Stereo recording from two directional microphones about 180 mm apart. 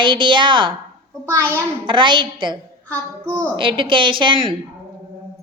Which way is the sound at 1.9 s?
25° right (ahead or behind).